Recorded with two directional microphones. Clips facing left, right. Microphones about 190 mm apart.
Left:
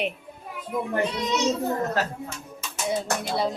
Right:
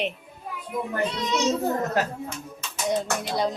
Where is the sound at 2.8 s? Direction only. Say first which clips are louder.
Right 1 dB; centre (ahead or behind).